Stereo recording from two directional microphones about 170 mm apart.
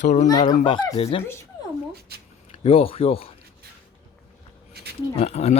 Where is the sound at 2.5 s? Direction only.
35° left (ahead or behind).